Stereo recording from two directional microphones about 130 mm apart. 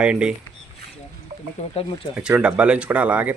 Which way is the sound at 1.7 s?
45° left (ahead or behind).